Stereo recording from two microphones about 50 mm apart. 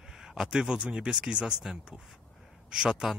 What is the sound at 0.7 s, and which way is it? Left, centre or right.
A man's voice, centre.